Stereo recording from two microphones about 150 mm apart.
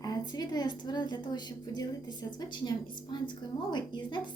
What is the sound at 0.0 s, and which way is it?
A woman's voice, 25° left (ahead or behind).